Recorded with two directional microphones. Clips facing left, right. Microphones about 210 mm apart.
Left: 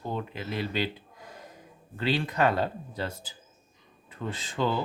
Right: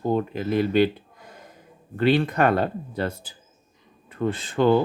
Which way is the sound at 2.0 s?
55° right (ahead or behind).